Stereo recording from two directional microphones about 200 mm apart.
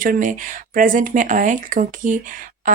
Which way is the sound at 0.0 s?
45° right (ahead or behind).